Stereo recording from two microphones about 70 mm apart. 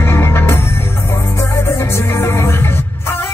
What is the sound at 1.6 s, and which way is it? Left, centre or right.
Music, left.